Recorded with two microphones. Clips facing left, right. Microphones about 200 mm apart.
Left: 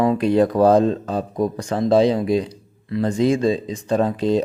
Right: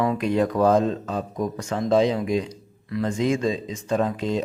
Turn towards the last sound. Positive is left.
turn(degrees=35)  # may be behind; listen again after turning